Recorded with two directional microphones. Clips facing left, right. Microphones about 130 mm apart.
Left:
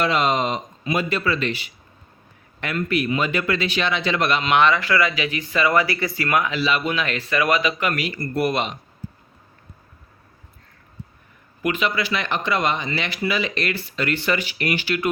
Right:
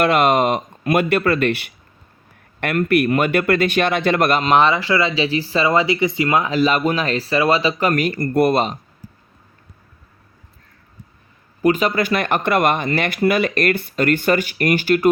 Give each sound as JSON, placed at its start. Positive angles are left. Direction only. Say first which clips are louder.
{"t": 0.0, "sound": "speech", "louder": "right 5 dB", "side_deg": -55}
{"t": 6.5, "sound": "speech", "louder": "right 6 dB", "side_deg": -40}
{"t": 11.6, "sound": "speech", "louder": "right 6 dB", "side_deg": -40}